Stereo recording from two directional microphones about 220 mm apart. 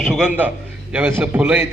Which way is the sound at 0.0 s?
5° right (ahead or behind).